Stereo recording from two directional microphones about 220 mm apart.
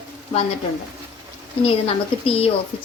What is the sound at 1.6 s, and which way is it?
Speech, 25° left (ahead or behind).